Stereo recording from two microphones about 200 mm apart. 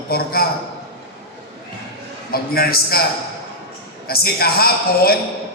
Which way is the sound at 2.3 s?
50° left (ahead or behind).